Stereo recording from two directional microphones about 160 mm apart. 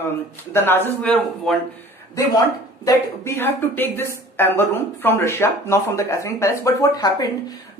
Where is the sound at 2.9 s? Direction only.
15° left (ahead or behind).